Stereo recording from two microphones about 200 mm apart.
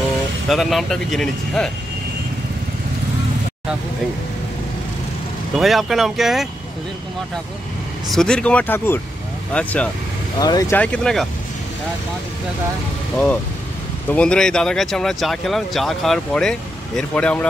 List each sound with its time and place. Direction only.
0.5 s speech: centre (ahead or behind)
5.6 s speech: centre (ahead or behind)
8.1 s speech: 5° left (ahead or behind)
10.4 s speech: 15° left (ahead or behind)
10.8 s speech: 5° left (ahead or behind)
14.1 s speech: 5° left (ahead or behind)